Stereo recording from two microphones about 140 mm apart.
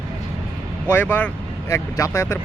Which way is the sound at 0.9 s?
15° left (ahead or behind).